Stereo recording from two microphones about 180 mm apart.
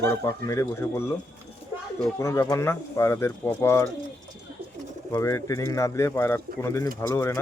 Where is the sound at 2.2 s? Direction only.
15° left (ahead or behind).